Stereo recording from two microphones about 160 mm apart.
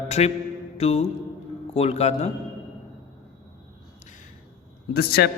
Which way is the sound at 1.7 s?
40° left (ahead or behind).